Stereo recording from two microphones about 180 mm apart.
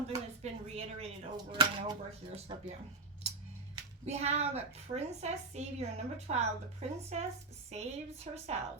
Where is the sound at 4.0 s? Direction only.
35° right (ahead or behind).